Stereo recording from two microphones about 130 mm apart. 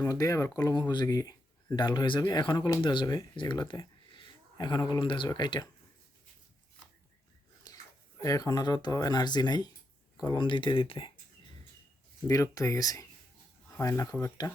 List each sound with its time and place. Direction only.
0.0 s speech: 25° left (ahead or behind)
7.7 s a sound: 30° left (ahead or behind)
8.2 s speech: 25° left (ahead or behind); by 11.1 s 45° left (ahead or behind)
12.3 s speech: 25° left (ahead or behind)